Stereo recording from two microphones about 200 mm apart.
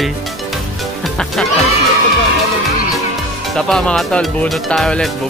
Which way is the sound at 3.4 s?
Centre (ahead or behind).